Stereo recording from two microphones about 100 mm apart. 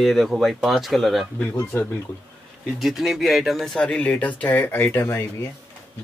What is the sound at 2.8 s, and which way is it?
Speech, 5° right (ahead or behind).